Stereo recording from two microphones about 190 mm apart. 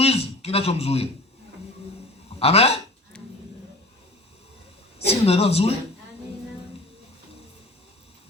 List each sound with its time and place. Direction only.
0.0 s a man's voice: 30° left (ahead or behind)
2.4 s speech: 30° left (ahead or behind)
4.9 s speech: 30° left (ahead or behind)